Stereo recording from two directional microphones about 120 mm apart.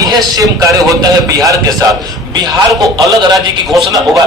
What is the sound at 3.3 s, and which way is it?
Speech, centre (ahead or behind).